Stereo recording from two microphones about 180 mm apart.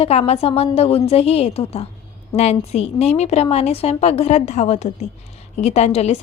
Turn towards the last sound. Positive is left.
turn(degrees=35)  # may be behind; listen again after turning